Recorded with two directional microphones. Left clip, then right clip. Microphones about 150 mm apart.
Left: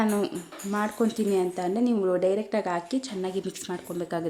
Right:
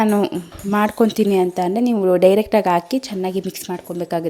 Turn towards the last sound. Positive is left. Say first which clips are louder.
# right 8 dB
turn(degrees=-40)  # may be behind; listen again after turning